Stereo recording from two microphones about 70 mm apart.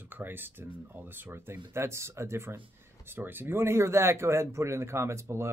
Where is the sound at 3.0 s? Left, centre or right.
Right.